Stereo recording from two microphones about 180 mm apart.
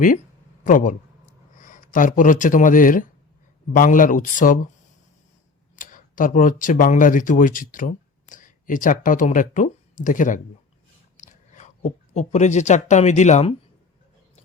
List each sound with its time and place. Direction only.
0.6 s a man's voice: 45° left (ahead or behind)
5.7 s speech: 50° left (ahead or behind)